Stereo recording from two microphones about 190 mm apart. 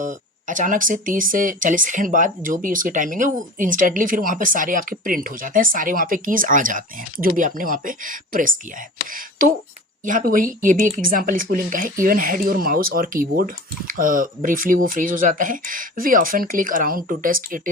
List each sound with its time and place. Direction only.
0.0 s speech: 40° right (ahead or behind)